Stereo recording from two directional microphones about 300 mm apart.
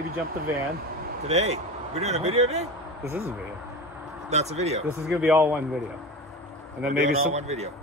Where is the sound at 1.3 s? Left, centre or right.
Right.